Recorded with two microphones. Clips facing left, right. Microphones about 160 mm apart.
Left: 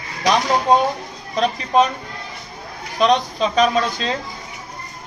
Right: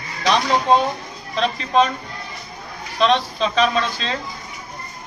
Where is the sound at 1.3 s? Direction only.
20° left (ahead or behind).